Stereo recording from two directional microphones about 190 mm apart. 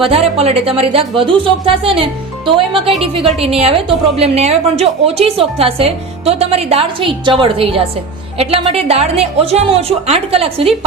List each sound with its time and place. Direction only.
0.0 s a woman's voice: 30° right (ahead or behind)